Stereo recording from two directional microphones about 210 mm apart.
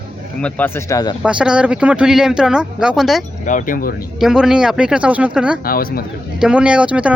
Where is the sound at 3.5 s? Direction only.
40° left (ahead or behind).